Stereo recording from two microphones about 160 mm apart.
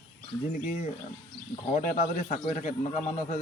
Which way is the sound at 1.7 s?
50° left (ahead or behind).